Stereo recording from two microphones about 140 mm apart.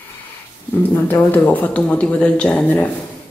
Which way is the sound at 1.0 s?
15° left (ahead or behind).